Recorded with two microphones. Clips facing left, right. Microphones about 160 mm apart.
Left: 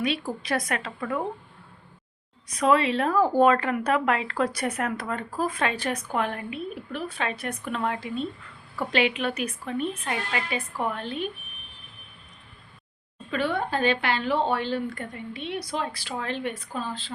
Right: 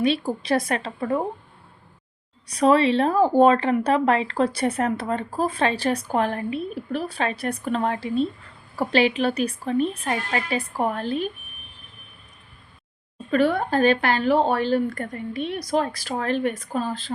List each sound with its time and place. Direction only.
0.0 s a woman's voice: 30° right (ahead or behind)
2.5 s speech: 30° right (ahead or behind)
13.3 s speech: 45° right (ahead or behind)